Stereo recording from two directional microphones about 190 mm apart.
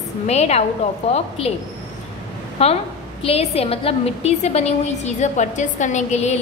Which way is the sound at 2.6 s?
30° left (ahead or behind).